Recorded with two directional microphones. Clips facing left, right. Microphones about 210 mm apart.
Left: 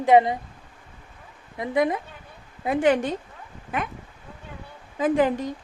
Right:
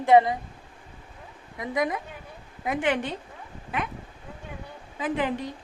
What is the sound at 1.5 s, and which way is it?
Speech, 25° left (ahead or behind).